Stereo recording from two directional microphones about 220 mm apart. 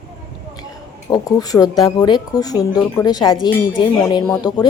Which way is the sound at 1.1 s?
15° left (ahead or behind).